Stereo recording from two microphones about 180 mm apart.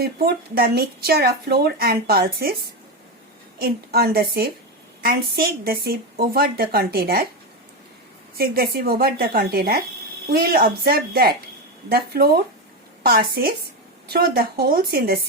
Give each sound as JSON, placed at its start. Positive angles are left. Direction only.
{"t": 0.0, "sound": "speech", "side_deg": -60}
{"t": 3.6, "sound": "speech", "side_deg": -60}
{"t": 8.4, "sound": "speech", "side_deg": -60}